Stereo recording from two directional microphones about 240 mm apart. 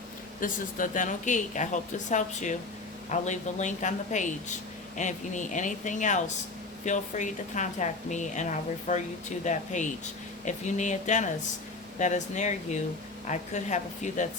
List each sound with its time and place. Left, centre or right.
0.3 s speech: left